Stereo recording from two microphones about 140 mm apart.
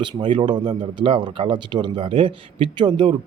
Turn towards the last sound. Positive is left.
turn(degrees=-35)  # may be behind; listen again after turning